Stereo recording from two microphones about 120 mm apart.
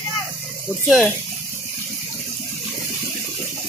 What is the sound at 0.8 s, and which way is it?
Speech, centre (ahead or behind).